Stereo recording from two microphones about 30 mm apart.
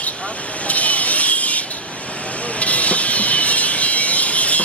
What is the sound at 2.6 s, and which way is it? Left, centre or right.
Vehicle, left.